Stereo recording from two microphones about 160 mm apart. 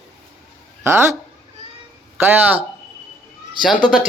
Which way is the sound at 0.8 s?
15° right (ahead or behind).